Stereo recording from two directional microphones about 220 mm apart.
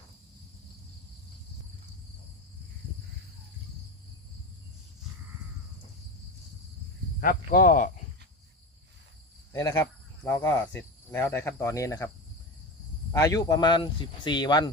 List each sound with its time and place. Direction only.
7.2 s speech: 40° left (ahead or behind)
9.5 s cricket: 15° left (ahead or behind)
13.1 s speech: 15° left (ahead or behind)